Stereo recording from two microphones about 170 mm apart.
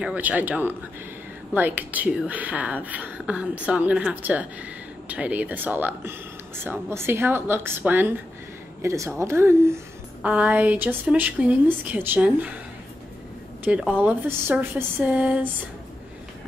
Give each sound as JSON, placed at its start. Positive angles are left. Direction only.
{"t": 0.0, "sound": "speech", "side_deg": -10}
{"t": 13.9, "sound": "speech", "side_deg": -10}